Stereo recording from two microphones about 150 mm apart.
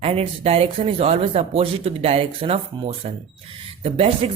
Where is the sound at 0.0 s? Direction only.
40° right (ahead or behind).